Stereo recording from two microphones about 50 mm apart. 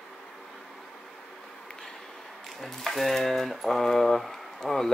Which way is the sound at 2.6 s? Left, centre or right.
Centre.